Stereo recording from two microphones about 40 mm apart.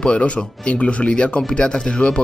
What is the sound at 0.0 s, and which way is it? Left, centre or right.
Speech, left.